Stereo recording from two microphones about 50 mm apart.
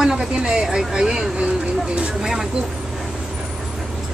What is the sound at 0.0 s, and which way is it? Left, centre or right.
Speech, centre.